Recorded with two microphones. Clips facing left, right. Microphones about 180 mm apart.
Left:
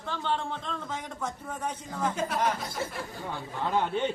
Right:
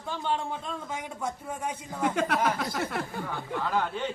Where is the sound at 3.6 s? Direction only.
20° left (ahead or behind).